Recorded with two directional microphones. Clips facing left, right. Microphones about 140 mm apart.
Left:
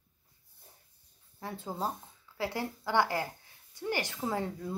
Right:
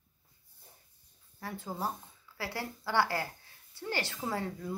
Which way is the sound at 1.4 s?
20° left (ahead or behind).